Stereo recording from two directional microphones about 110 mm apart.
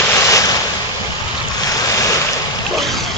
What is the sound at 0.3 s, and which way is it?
Ocean, 30° left (ahead or behind).